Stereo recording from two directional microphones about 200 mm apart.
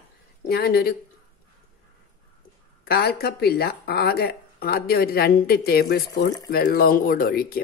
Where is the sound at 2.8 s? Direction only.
50° left (ahead or behind).